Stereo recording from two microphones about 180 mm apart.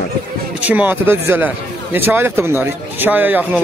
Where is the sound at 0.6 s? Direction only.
10° right (ahead or behind).